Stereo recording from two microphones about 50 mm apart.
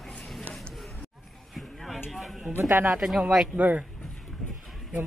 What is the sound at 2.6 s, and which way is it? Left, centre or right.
Speech, right.